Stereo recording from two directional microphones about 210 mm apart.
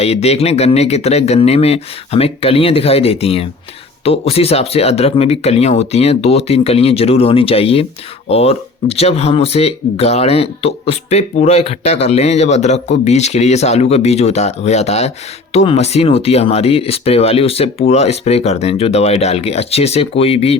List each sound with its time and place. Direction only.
0.0 s speech: 30° left (ahead or behind)